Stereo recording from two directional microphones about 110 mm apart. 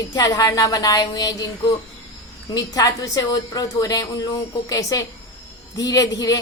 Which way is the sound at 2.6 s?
35° left (ahead or behind).